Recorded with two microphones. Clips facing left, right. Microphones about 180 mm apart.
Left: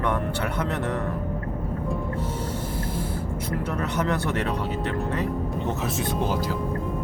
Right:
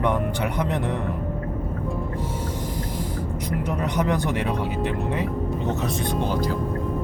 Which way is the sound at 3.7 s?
15° right (ahead or behind).